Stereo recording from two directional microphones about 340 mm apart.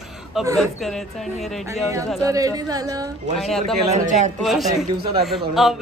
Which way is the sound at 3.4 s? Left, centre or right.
Centre.